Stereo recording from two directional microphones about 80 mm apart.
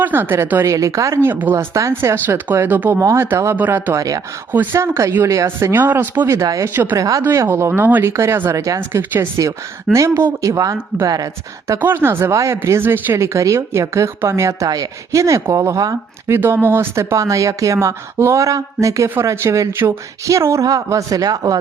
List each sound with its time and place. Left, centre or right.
0.0 s speech: right
0.6 s speech: right
1.9 s speech: right
3.0 s speech: right
3.5 s speech: right
3.9 s speech: right
4.5 s speech: right
7.3 s speech: right
7.7 s speech: right
8.1 s speech: right
11.8 s speech: right